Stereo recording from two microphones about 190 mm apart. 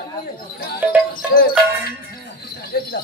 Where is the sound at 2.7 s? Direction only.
55° left (ahead or behind).